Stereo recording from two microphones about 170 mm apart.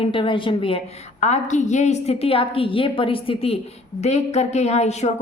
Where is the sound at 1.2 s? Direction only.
45° left (ahead or behind).